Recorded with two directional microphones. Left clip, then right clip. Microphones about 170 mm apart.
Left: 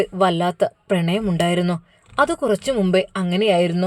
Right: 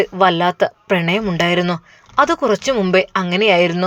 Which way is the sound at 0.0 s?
25° left (ahead or behind).